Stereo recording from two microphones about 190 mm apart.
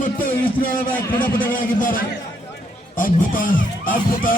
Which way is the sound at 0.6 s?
45° left (ahead or behind).